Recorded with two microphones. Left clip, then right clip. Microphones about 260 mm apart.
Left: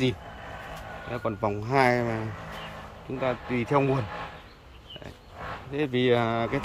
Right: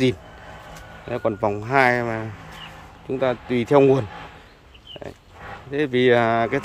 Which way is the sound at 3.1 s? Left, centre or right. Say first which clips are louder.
Right 6 dB; right.